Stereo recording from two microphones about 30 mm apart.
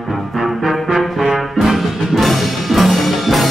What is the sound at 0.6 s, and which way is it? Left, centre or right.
Brass instrument, centre.